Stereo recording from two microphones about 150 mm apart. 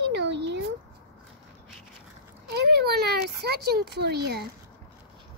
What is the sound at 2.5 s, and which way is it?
Speech, 90° right.